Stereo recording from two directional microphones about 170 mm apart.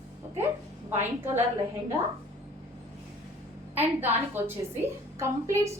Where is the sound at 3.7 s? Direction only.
10° right (ahead or behind).